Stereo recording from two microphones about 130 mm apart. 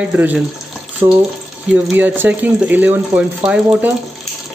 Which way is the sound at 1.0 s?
30° right (ahead or behind).